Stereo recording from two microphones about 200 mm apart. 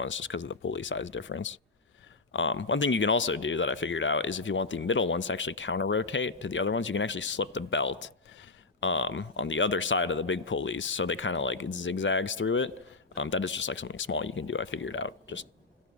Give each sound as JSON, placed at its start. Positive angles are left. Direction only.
{"t": 0.0, "sound": "speech", "side_deg": 70}